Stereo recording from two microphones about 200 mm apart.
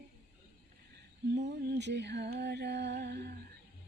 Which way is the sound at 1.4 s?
60° right (ahead or behind).